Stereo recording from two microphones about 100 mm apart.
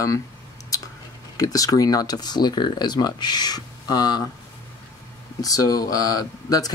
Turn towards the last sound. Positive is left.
turn(degrees=40)  # may be behind; listen again after turning